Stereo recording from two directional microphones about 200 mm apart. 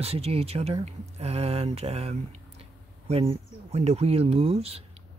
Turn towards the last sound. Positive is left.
turn(degrees=-30)  # may be behind; listen again after turning